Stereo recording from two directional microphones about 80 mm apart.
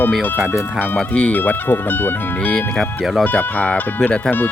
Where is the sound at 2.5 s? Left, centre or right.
Centre.